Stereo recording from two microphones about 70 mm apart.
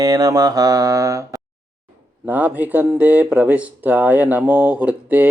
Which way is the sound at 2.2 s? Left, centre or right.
Right.